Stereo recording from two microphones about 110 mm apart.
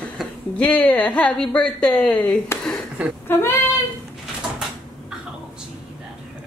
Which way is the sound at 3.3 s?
25° left (ahead or behind).